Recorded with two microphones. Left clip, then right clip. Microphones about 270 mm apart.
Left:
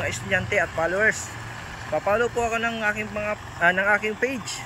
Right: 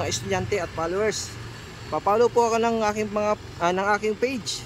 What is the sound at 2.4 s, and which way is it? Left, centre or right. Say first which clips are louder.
Speech: right 3 dB; centre.